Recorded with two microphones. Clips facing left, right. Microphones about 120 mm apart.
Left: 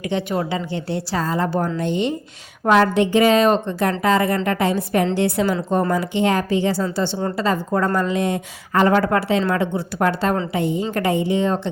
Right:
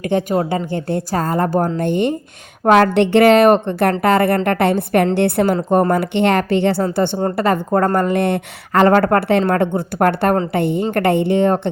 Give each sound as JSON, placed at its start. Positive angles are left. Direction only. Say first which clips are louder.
{"t": 0.0, "sound": "a woman's voice", "louder": "right 5 dB", "side_deg": -50}